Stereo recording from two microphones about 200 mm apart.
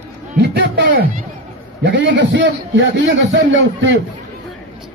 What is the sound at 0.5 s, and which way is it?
Music, 50° right (ahead or behind).